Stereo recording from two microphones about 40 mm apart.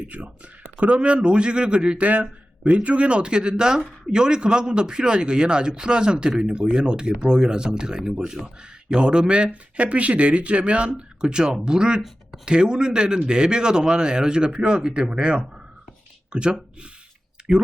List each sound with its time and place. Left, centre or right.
0.0 s speech: right; by 8.0 s centre
8.4 s speech: centre
8.9 s speech: right